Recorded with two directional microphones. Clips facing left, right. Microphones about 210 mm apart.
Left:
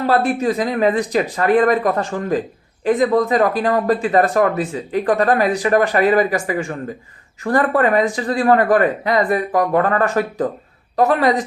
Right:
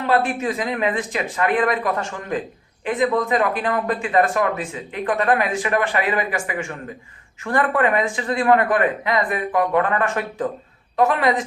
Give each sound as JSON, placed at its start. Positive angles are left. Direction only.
{"t": 0.0, "sound": "speech", "side_deg": 40}